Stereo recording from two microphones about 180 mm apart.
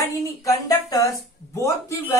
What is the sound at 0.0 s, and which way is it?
Speech, 20° left (ahead or behind).